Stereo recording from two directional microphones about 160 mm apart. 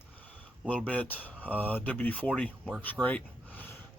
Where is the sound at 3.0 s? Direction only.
10° left (ahead or behind).